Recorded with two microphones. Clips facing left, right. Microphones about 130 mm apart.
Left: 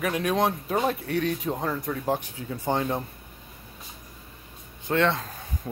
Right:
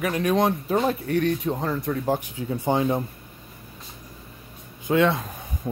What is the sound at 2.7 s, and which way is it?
Speech, 15° right (ahead or behind).